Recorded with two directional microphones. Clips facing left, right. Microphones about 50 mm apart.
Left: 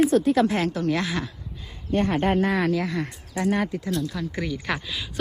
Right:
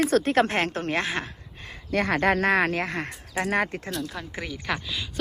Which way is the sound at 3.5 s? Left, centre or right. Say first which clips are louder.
Left 2 dB; right.